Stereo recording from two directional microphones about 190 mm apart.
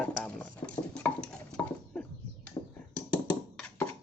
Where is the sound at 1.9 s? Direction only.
5° left (ahead or behind).